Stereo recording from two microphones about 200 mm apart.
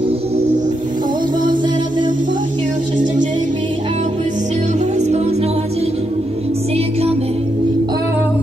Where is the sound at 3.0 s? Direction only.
40° right (ahead or behind).